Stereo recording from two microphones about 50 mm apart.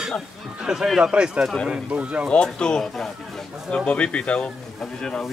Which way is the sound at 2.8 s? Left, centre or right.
Centre.